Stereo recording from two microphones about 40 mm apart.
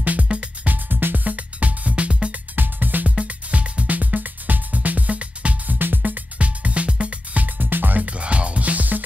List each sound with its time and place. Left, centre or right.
0.0 s music: right
2.5 s music: right
3.3 s music: right
3.9 s music: right
5.7 s music: right
7.4 s music: right
8.0 s music: right